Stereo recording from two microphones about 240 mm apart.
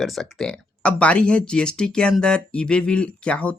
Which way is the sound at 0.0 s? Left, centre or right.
Centre.